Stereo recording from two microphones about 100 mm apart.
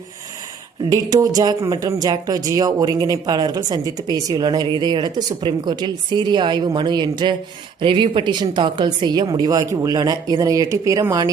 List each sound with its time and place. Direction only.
0.9 s speech: 35° right (ahead or behind)